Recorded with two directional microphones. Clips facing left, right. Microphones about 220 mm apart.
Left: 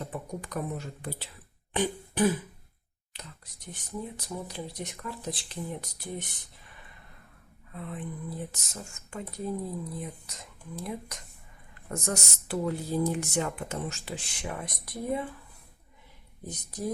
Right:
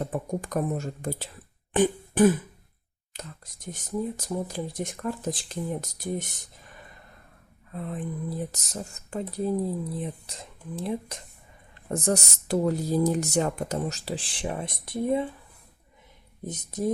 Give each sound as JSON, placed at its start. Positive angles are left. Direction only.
{"t": 0.0, "sound": "speech", "side_deg": -45}
{"t": 1.7, "sound": "throat clearing", "side_deg": -50}
{"t": 3.1, "sound": "speech", "side_deg": -45}
{"t": 7.7, "sound": "speech", "side_deg": -40}
{"t": 16.4, "sound": "speech", "side_deg": -20}